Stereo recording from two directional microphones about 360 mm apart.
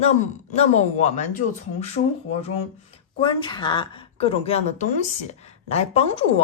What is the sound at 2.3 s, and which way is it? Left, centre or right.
Speech, centre.